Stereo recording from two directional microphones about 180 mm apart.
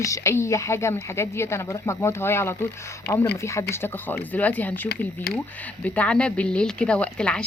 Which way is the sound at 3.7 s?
10° left (ahead or behind).